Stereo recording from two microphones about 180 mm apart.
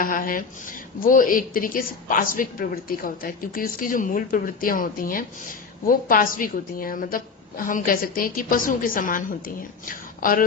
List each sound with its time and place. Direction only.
0.0 s a woman's voice: 50° left (ahead or behind)